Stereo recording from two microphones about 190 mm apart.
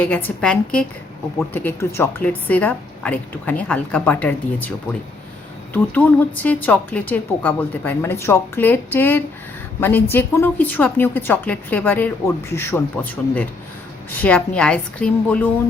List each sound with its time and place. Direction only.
0.0 s a woman's voice: 10° left (ahead or behind)
5.7 s a woman's voice: 10° left (ahead or behind)